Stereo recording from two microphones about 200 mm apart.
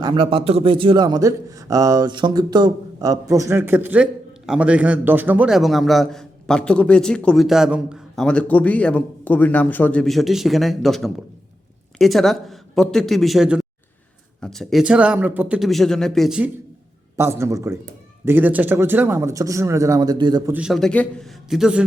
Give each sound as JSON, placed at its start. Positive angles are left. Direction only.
{"t": 0.0, "sound": "a man's voice", "side_deg": -20}
{"t": 17.2, "sound": "speech", "side_deg": -10}
{"t": 20.5, "sound": "a man's voice", "side_deg": -5}